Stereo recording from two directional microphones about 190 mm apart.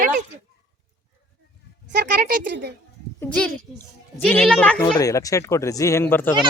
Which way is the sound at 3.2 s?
5° left (ahead or behind).